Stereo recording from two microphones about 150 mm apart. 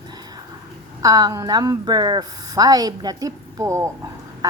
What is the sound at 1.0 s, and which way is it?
A woman's voice, 25° right (ahead or behind).